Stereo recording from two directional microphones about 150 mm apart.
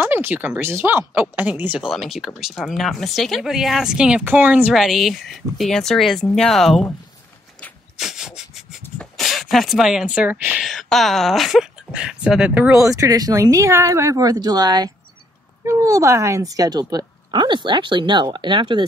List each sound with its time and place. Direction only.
0.0 s speech: 10° right (ahead or behind)
8.0 s a sound: 5° right (ahead or behind)
10.7 s speech: centre (ahead or behind)
12.9 s speech: 25° right (ahead or behind)